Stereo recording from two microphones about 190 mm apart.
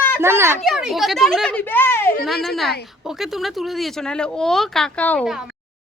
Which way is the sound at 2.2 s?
Centre (ahead or behind).